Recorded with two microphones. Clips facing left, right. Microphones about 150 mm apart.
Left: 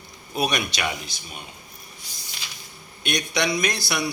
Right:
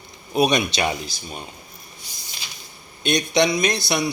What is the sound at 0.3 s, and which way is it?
Speech, 20° right (ahead or behind).